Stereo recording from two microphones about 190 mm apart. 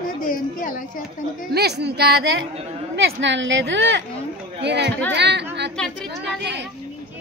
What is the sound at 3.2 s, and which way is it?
A woman's voice, 75° right (ahead or behind).